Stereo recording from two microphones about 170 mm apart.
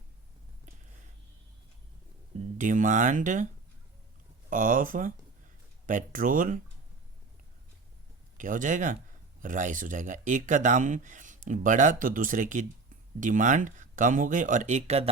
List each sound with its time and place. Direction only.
2.6 s speech: 50° right (ahead or behind)
4.4 s speech: 50° right (ahead or behind)
8.4 s speech: 50° right (ahead or behind)